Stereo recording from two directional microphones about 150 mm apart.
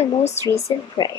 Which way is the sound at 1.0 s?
25° left (ahead or behind).